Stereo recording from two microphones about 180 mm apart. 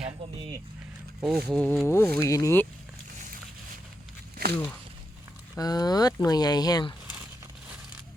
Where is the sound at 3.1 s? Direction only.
45° right (ahead or behind).